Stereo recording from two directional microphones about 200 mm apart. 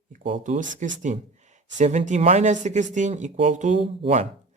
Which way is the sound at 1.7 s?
35° right (ahead or behind).